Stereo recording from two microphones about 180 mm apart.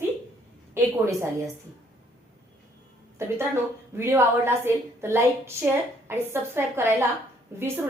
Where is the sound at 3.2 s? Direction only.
15° right (ahead or behind).